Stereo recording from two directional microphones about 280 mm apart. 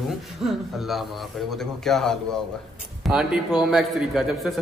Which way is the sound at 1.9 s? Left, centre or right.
Centre.